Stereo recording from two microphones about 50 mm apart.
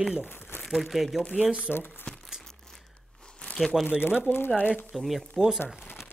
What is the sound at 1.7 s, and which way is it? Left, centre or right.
Speech, left.